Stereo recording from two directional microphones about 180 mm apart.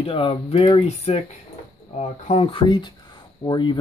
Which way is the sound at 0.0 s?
30° left (ahead or behind).